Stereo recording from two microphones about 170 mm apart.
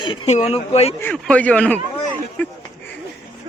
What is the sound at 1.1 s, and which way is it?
Speech, 5° left (ahead or behind).